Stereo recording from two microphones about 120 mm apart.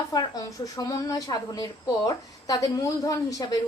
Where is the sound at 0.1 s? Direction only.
30° left (ahead or behind).